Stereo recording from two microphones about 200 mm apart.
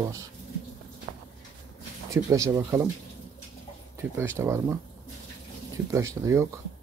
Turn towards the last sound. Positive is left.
turn(degrees=-15)  # may be behind; listen again after turning